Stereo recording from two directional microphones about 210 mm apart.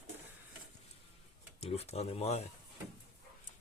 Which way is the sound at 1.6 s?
30° left (ahead or behind).